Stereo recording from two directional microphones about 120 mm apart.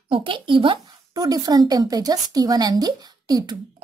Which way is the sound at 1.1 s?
30° right (ahead or behind).